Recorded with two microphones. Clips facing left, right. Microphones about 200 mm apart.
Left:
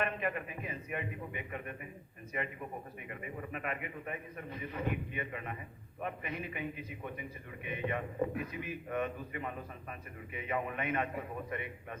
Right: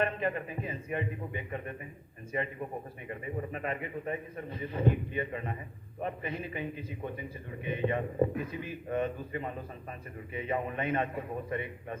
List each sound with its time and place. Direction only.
0.0 s a man's voice: 30° right (ahead or behind)